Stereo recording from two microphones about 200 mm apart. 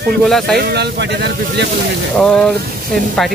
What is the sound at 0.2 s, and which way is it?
Speech, centre (ahead or behind).